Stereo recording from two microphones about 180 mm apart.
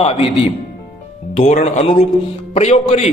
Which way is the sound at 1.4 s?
35° left (ahead or behind).